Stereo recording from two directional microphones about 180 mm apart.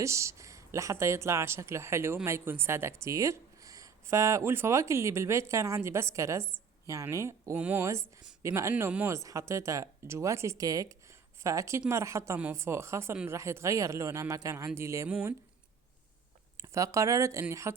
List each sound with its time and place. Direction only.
0.0 s speech: 15° right (ahead or behind)
16.6 s speech: 20° right (ahead or behind)